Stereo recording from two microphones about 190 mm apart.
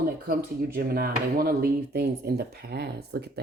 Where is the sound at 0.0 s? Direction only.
50° right (ahead or behind).